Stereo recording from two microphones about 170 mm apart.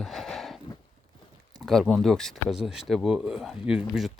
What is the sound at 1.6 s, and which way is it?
Speech, centre (ahead or behind).